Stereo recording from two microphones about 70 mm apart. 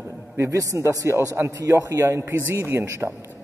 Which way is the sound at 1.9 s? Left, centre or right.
Right.